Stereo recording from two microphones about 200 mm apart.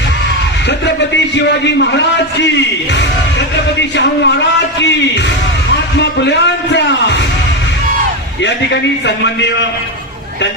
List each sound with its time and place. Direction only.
0.7 s speech: 60° left (ahead or behind)
3.8 s speech: 60° left (ahead or behind)
6.0 s speech: 60° left (ahead or behind)
8.4 s speech: 60° left (ahead or behind)